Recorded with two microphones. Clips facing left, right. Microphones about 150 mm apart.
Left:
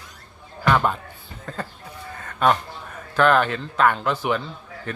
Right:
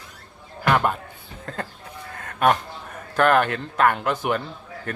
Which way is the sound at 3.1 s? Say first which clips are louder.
Even; 50° right (ahead or behind).